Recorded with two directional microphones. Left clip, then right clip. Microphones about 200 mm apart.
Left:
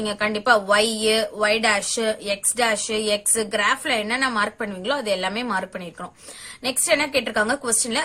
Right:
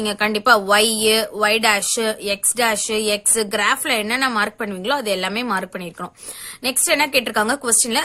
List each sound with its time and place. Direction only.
0.0 s a woman's voice: 40° right (ahead or behind)